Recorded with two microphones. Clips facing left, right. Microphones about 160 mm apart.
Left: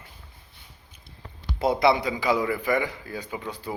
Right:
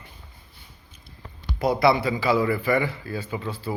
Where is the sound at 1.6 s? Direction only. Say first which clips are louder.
Right 1 dB; 20° left (ahead or behind).